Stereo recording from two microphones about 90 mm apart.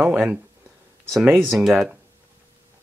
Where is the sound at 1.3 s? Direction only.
Centre (ahead or behind).